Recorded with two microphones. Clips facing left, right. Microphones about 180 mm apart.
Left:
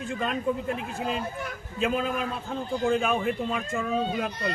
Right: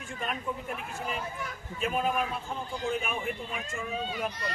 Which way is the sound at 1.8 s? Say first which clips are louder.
Left 2 dB; 90° left.